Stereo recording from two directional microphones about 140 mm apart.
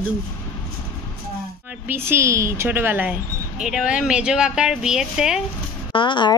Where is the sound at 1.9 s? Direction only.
20° right (ahead or behind).